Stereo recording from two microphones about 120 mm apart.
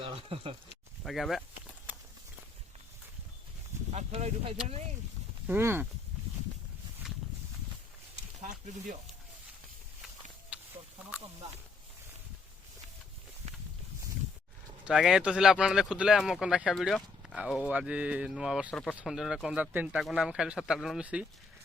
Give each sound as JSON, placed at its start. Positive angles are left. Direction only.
{"t": 0.0, "sound": "speech", "side_deg": -50}
{"t": 1.0, "sound": "speech", "side_deg": 0}
{"t": 3.9, "sound": "speech", "side_deg": -60}
{"t": 5.5, "sound": "speech", "side_deg": -20}
{"t": 8.4, "sound": "speech", "side_deg": -90}
{"t": 10.5, "sound": "a sound", "side_deg": -10}
{"t": 14.8, "sound": "speech", "side_deg": -5}